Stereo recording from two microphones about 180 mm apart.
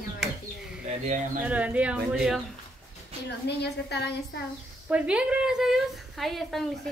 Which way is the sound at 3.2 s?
70° left (ahead or behind).